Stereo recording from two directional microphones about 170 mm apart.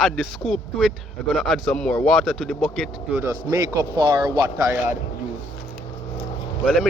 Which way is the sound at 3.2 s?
20° right (ahead or behind).